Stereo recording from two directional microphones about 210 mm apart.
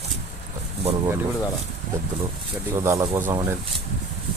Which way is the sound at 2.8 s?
15° right (ahead or behind).